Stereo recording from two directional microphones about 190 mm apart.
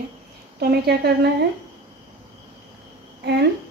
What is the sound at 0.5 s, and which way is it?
Speech, 55° right (ahead or behind).